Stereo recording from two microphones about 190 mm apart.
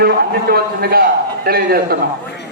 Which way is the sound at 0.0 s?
55° right (ahead or behind).